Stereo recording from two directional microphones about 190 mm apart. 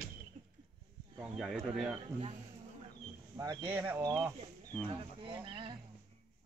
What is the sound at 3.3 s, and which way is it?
Speech, 15° right (ahead or behind).